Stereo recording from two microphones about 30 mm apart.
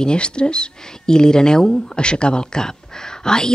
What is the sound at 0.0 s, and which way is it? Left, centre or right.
Speech, left.